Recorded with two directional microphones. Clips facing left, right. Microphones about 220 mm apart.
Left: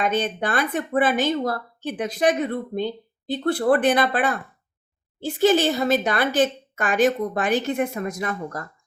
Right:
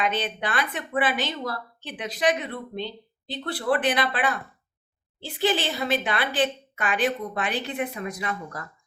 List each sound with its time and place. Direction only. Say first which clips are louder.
0.0 s a woman's voice: left 4 dB; 45° left (ahead or behind)